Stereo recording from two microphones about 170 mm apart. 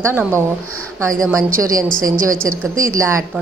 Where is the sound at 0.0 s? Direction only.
15° right (ahead or behind).